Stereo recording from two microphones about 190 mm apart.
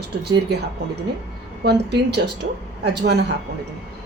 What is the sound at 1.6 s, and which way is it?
A woman's voice, 60° right (ahead or behind).